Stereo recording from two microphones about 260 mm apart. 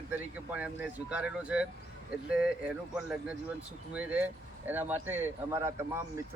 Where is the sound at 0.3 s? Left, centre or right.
Centre.